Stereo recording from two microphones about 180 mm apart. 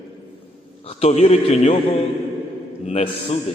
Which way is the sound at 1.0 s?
35° left (ahead or behind).